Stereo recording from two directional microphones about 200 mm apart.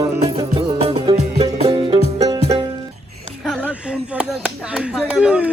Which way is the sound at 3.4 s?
5° right (ahead or behind).